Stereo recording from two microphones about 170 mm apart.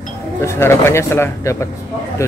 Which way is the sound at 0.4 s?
15° left (ahead or behind).